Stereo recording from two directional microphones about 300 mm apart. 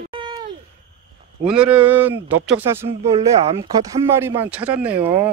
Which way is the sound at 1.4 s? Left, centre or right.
Centre.